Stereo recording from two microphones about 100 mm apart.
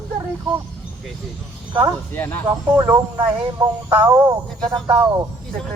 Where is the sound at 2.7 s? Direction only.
20° right (ahead or behind).